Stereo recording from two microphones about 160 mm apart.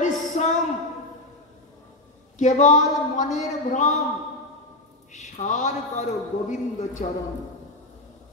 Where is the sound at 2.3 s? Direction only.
50° left (ahead or behind).